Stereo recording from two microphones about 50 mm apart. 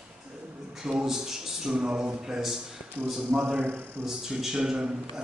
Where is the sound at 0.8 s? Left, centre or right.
Centre.